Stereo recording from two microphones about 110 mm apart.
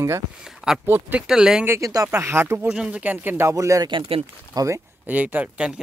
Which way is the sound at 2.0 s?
20° right (ahead or behind).